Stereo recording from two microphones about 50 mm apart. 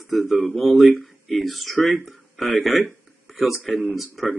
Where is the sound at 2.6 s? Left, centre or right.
Centre.